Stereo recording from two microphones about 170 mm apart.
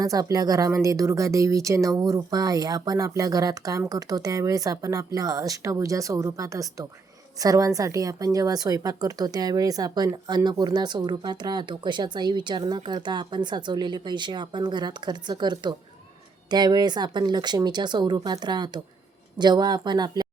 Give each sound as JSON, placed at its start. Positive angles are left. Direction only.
{"t": 0.0, "sound": "speech", "side_deg": -20}